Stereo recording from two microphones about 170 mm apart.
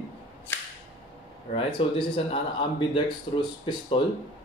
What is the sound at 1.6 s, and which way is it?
Speech, 30° left (ahead or behind).